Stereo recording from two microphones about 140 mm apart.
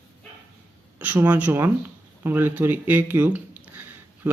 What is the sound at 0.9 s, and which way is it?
Speech, 10° right (ahead or behind).